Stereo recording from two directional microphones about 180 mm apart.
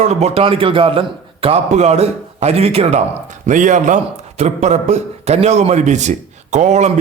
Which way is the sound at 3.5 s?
45° right (ahead or behind).